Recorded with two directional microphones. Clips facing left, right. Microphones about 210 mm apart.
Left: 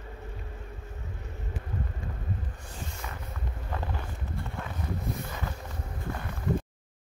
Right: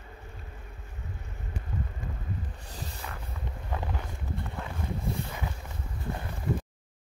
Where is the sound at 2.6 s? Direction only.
35° right (ahead or behind).